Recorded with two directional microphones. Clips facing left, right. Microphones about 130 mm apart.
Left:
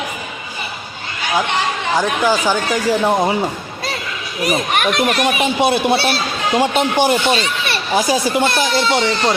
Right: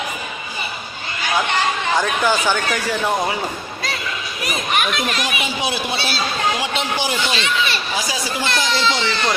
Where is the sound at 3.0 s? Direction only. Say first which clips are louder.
Left 5 dB; 25° left (ahead or behind).